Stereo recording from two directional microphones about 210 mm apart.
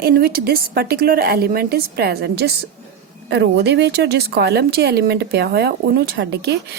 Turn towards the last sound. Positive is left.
turn(degrees=-55)  # may be behind; listen again after turning